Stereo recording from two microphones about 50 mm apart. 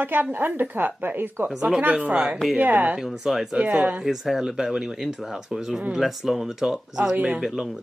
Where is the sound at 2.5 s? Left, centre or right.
Right.